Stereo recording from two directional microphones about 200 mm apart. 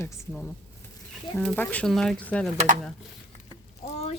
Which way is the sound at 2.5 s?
40° right (ahead or behind).